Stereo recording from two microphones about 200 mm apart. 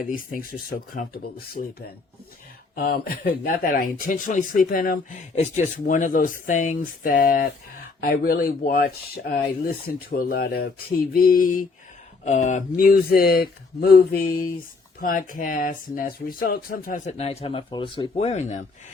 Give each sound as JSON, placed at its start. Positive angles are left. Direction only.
{"t": 0.0, "sound": "speech", "side_deg": 45}
{"t": 2.7, "sound": "speech", "side_deg": 50}